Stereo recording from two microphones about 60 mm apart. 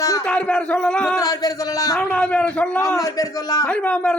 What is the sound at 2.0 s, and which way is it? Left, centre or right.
Speech, centre.